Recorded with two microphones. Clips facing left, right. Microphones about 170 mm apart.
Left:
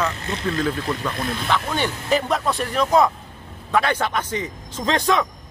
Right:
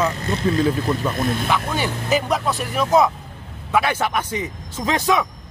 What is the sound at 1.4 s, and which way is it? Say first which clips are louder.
A man's voice: right 1 dB; 5° right (ahead or behind).